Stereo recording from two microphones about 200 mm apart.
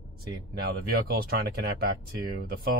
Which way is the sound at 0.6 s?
50° right (ahead or behind).